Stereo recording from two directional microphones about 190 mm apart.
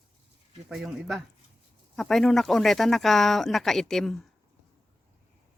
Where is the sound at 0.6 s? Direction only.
5° right (ahead or behind).